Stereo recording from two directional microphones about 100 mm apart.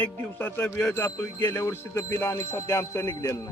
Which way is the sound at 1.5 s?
30° left (ahead or behind).